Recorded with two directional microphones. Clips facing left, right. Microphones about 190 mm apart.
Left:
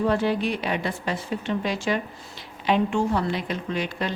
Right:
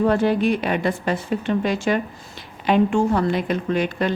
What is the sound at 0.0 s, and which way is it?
A woman's voice, 50° right (ahead or behind).